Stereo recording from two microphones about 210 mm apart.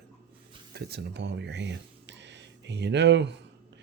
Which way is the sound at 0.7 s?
50° right (ahead or behind).